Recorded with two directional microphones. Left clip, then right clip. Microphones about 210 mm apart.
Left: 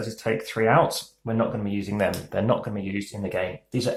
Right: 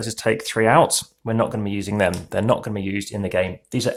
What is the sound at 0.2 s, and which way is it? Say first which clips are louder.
Speech: right 5 dB; 45° right (ahead or behind).